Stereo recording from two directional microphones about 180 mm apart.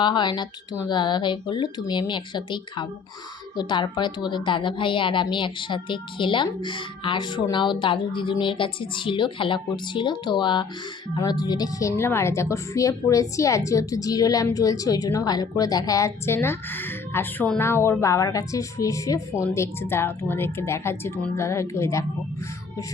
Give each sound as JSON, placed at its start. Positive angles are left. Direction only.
{"t": 0.0, "sound": "a woman's voice", "side_deg": 25}